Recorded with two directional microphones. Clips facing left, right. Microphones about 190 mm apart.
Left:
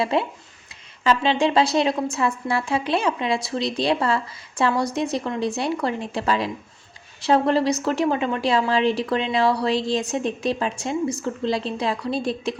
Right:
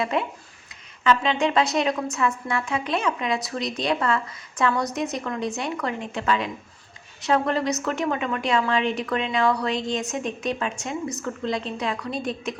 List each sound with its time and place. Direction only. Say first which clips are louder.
0.0 s a woman's voice: left 3 dB; 30° left (ahead or behind)